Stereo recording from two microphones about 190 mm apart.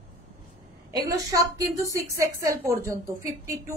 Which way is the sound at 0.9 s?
20° right (ahead or behind).